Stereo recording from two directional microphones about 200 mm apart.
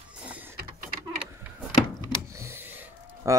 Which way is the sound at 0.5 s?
45° right (ahead or behind).